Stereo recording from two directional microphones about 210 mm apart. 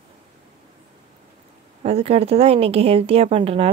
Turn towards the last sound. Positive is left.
turn(degrees=-25)  # may be behind; listen again after turning